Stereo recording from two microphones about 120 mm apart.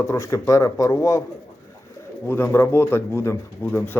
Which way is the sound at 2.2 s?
20° left (ahead or behind).